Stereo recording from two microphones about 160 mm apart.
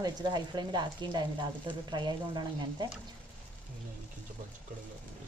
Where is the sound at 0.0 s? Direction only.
25° right (ahead or behind).